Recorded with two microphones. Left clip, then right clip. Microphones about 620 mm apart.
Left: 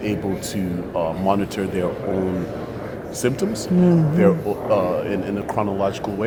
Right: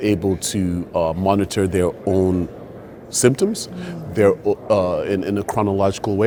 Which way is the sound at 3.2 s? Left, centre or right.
Right.